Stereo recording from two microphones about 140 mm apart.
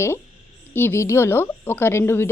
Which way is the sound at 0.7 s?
15° left (ahead or behind).